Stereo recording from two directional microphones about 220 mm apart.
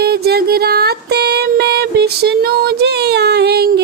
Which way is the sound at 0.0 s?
45° right (ahead or behind).